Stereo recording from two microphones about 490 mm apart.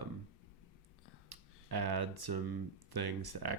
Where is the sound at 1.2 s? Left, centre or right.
Right.